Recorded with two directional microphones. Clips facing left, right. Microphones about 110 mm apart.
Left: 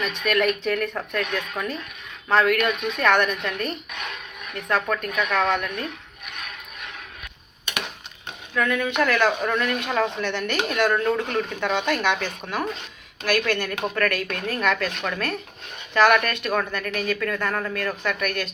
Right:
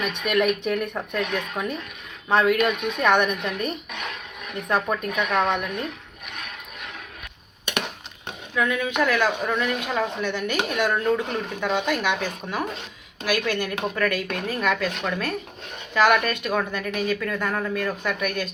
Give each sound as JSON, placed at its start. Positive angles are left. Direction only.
{"t": 0.3, "sound": "a woman's voice", "side_deg": -15}
{"t": 8.5, "sound": "a woman's voice", "side_deg": -5}